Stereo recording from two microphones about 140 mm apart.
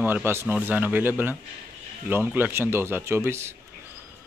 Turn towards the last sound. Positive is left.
turn(degrees=-15)  # may be behind; listen again after turning